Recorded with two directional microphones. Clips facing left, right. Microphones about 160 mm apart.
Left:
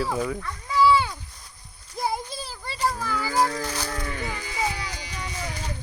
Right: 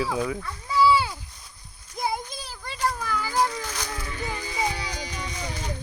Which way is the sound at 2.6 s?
5° left (ahead or behind).